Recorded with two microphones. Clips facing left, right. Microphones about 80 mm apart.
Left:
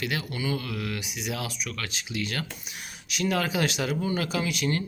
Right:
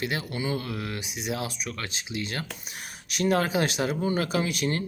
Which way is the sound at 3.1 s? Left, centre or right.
Right.